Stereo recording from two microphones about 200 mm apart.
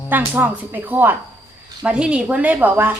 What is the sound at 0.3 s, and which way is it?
A woman's voice, 10° right (ahead or behind).